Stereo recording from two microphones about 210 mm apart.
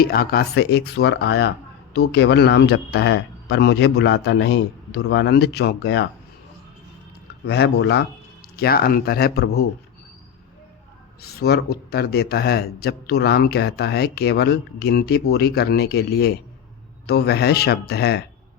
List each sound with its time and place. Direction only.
0.0 s speech: 45° left (ahead or behind)
7.4 s speech: 50° left (ahead or behind)
11.2 s speech: 50° left (ahead or behind)